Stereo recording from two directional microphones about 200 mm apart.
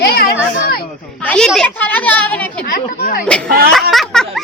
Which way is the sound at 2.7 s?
45° left (ahead or behind).